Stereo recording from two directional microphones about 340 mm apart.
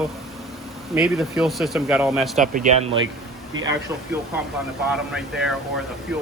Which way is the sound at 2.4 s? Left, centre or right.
Right.